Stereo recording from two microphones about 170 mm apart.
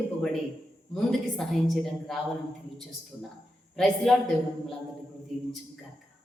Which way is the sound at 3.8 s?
Centre (ahead or behind).